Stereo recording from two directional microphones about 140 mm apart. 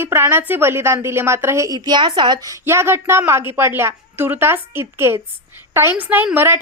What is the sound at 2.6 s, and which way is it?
A woman's voice, 15° right (ahead or behind).